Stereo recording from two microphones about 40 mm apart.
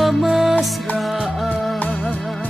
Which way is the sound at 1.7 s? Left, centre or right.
Left.